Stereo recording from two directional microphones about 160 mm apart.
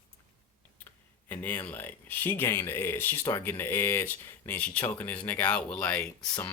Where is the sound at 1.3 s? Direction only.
10° left (ahead or behind).